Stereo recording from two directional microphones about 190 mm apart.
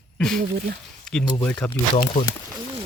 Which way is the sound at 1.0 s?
5° left (ahead or behind).